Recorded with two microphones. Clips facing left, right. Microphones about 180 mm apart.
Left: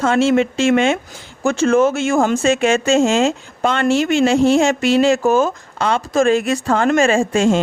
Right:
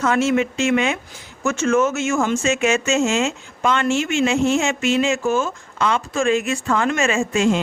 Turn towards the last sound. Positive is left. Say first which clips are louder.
# left 5 dB
turn(degrees=30)  # may be behind; listen again after turning